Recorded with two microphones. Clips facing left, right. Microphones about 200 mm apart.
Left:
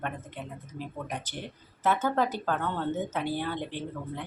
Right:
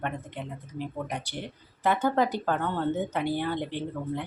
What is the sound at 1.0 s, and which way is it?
Speech, 10° right (ahead or behind).